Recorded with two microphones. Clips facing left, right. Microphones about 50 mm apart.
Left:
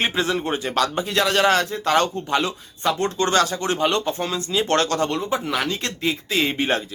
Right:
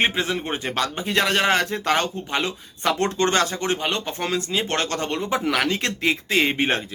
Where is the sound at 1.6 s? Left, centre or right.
Right.